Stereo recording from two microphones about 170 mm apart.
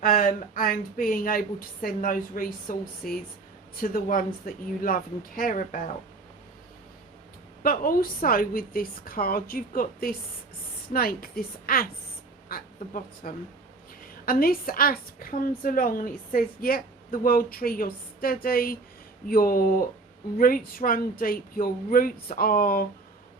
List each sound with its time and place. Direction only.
0.0 s a woman's voice: 55° left (ahead or behind)
7.6 s a woman's voice: 55° left (ahead or behind)